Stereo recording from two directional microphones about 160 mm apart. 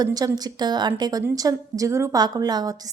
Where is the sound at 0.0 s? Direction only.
25° right (ahead or behind).